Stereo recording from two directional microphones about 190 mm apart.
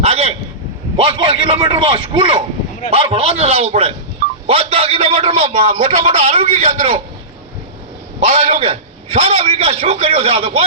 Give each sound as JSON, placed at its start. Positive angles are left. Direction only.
{"t": 0.0, "sound": "a sound", "side_deg": -35}
{"t": 0.9, "sound": "a man's voice", "side_deg": -25}
{"t": 8.2, "sound": "a man's voice", "side_deg": -35}